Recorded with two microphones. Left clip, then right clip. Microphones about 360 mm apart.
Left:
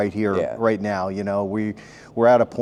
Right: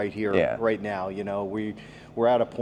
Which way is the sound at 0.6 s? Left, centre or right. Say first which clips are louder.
Left 5 dB; left.